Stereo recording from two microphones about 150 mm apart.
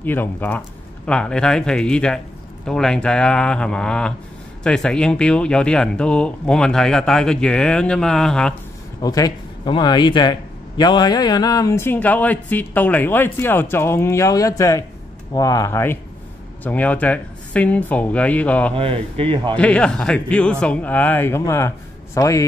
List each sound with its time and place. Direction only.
0.0 s speech: 10° left (ahead or behind)
9.0 s speech: 25° left (ahead or behind); by 18.7 s 10° left (ahead or behind)
18.8 s speech: 40° right (ahead or behind)
19.5 s speech: 5° left (ahead or behind)